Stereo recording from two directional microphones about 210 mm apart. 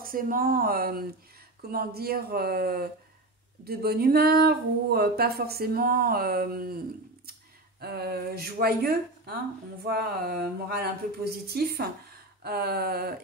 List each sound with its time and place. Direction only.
0.0 s speech: 40° right (ahead or behind)
7.8 s speech: 50° right (ahead or behind)